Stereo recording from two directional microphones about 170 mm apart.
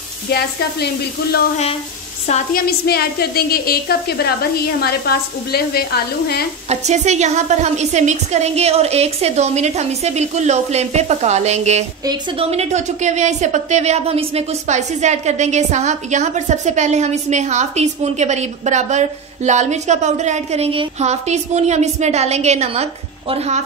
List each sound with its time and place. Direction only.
0.3 s a woman's voice: 70° left (ahead or behind)
2.5 s a woman's voice: 65° left (ahead or behind)
6.7 s a woman's voice: 40° right (ahead or behind)
12.0 s a woman's voice: 25° right (ahead or behind)
12.4 s a woman's voice: 40° right (ahead or behind)